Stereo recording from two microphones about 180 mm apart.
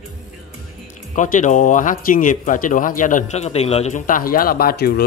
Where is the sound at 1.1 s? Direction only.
45° left (ahead or behind).